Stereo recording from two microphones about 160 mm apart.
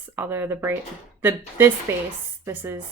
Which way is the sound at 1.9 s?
15° right (ahead or behind).